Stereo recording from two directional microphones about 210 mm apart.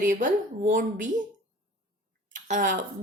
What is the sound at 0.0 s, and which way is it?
Speech, 40° right (ahead or behind).